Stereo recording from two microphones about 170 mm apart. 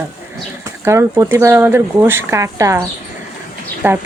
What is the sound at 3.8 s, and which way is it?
Speech, 10° right (ahead or behind).